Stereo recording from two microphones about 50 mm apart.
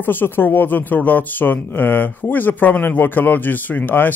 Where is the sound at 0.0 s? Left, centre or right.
Left.